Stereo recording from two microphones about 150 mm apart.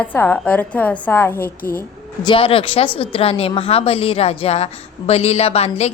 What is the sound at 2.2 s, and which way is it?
A woman's voice, 35° left (ahead or behind).